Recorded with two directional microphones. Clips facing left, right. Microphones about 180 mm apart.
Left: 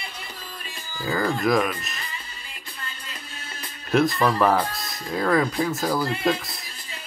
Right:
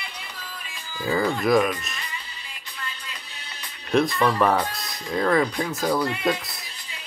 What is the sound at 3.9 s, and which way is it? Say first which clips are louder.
Speech: even; centre (ahead or behind).